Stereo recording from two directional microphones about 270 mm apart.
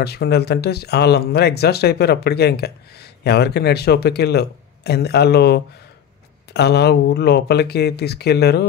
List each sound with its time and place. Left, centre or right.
0.0 s speech: left